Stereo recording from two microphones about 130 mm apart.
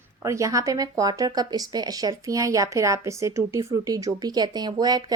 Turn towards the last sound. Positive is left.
turn(degrees=-30)  # may be behind; listen again after turning